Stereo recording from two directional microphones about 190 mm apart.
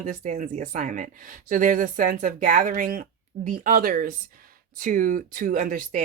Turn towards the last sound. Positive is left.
turn(degrees=-45)  # may be behind; listen again after turning